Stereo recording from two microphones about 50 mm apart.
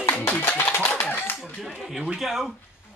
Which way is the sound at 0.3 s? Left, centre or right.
Left.